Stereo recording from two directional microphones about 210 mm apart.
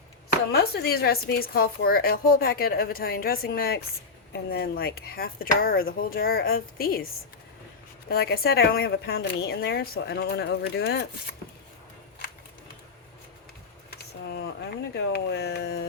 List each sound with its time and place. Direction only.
0.5 s a woman's voice: 50° left (ahead or behind)
8.1 s a woman's voice: 50° left (ahead or behind)
13.9 s speech: 50° left (ahead or behind)